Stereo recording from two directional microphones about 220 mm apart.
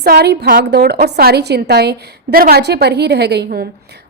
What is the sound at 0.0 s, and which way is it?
A woman's voice, 45° right (ahead or behind).